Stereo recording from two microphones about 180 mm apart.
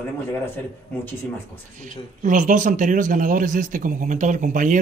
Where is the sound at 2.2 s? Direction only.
45° right (ahead or behind).